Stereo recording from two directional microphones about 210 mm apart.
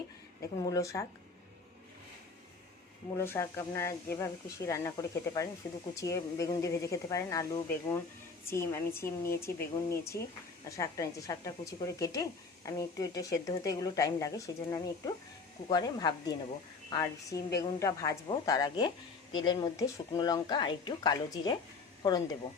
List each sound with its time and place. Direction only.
0.6 s speech: 15° left (ahead or behind)
3.2 s speech: 15° left (ahead or behind)